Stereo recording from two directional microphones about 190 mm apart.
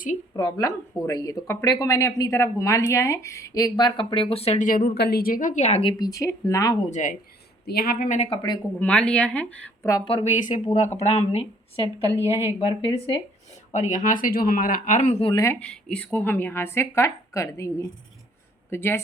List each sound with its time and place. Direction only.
0.3 s speech: 20° left (ahead or behind)
5.9 s a woman's voice: 20° left (ahead or behind)
6.9 s speech: 45° left (ahead or behind)
7.7 s speech: 55° left (ahead or behind)
8.3 s speech: 20° left (ahead or behind)
8.8 s a woman's voice: 5° left (ahead or behind)
9.9 s speech: 30° left (ahead or behind)
12.2 s a woman's voice: 10° right (ahead or behind)
12.5 s speech: 25° left (ahead or behind)
13.7 s speech: 40° left (ahead or behind)
15.3 s a woman's voice: 15° left (ahead or behind)
15.6 s a woman's voice: 5° left (ahead or behind)